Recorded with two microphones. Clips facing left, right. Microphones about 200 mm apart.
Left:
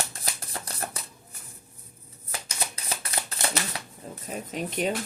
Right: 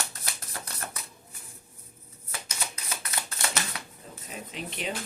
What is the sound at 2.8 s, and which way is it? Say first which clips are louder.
Shuffling cards: left 3 dB; 30° left (ahead or behind).